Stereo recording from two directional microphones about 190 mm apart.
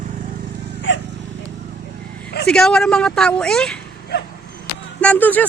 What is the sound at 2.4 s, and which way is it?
Speech, 5° left (ahead or behind).